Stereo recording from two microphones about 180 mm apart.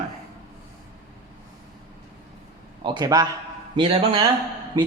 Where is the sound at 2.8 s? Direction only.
25° right (ahead or behind).